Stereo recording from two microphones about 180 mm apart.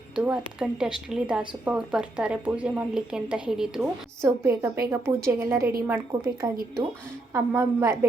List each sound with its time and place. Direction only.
0.2 s a woman's voice: 5° right (ahead or behind)